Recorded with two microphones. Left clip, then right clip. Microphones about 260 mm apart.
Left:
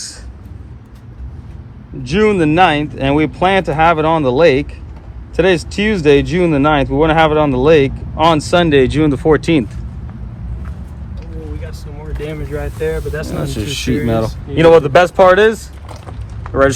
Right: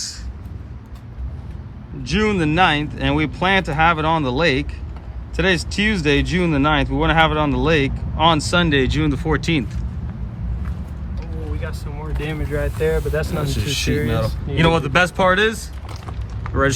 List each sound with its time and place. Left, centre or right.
2.0 s speech: centre
12.3 s speech: right
13.4 s speech: centre